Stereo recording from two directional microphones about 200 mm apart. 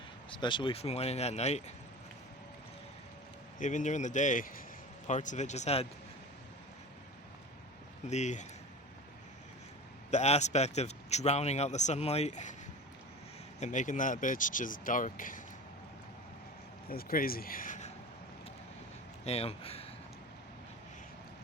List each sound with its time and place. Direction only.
0.3 s a man's voice: 25° left (ahead or behind)
3.6 s a man's voice: 40° left (ahead or behind)
8.1 s a man's voice: 35° left (ahead or behind)
10.1 s a man's voice: 35° left (ahead or behind)
13.6 s a man's voice: 40° left (ahead or behind)
16.9 s speech: 50° left (ahead or behind)
19.2 s speech: 30° left (ahead or behind)